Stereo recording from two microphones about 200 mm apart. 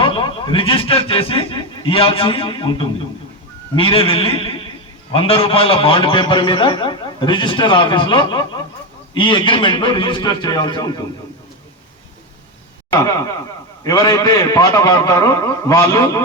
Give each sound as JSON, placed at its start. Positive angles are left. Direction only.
{"t": 0.0, "sound": "a man's voice", "side_deg": 25}
{"t": 13.0, "sound": "a man's voice", "side_deg": 15}